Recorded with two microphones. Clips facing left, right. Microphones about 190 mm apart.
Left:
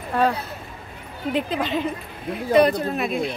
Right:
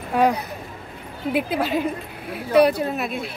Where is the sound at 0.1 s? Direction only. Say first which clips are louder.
Right 2 dB; 15° right (ahead or behind).